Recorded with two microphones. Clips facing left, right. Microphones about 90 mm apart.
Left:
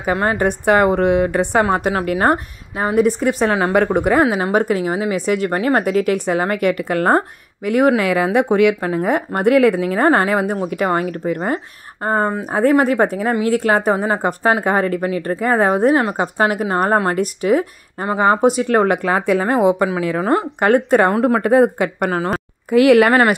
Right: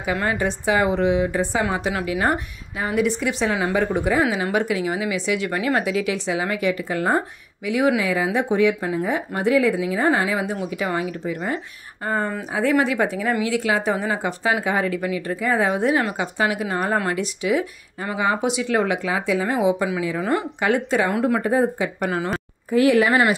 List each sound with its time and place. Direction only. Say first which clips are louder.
0.0 s a woman's voice: left 5 dB; 40° left (ahead or behind)
0.5 s a woman's voice: left 7 dB; 55° left (ahead or behind)
20.2 s a woman's voice: left 6 dB; 45° left (ahead or behind)
21.4 s speech: left 7 dB; 65° left (ahead or behind); by 22.4 s 45° left (ahead or behind)
22.7 s speech: left 6 dB; 75° left (ahead or behind); by 23.3 s 60° left (ahead or behind)